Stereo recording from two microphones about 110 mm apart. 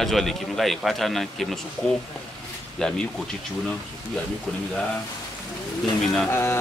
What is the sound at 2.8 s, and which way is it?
Speech, 5° left (ahead or behind).